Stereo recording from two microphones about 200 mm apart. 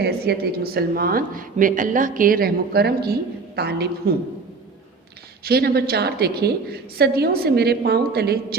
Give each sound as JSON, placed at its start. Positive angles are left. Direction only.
{"t": 0.0, "sound": "a woman's voice", "side_deg": -50}
{"t": 5.5, "sound": "speech", "side_deg": -50}